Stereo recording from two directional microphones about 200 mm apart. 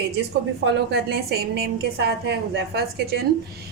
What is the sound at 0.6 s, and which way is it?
A woman's voice, 55° right (ahead or behind).